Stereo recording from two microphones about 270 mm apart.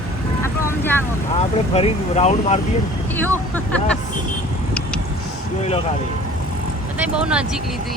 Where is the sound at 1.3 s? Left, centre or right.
Left.